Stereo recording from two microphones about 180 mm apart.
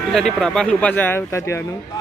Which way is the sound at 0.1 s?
5° left (ahead or behind).